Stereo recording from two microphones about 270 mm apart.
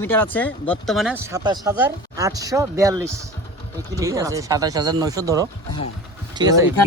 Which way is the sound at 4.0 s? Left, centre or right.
Centre.